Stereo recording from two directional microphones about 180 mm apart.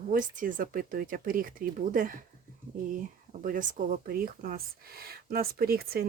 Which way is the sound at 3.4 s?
45° right (ahead or behind).